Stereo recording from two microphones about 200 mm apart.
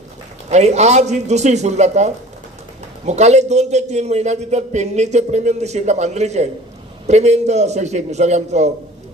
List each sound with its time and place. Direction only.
0.5 s a man's voice: 35° right (ahead or behind)